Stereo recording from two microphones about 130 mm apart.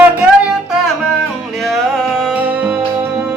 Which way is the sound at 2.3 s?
10° right (ahead or behind).